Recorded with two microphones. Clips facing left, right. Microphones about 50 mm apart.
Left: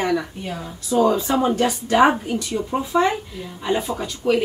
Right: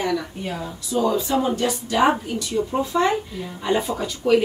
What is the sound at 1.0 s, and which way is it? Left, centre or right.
Speech, left.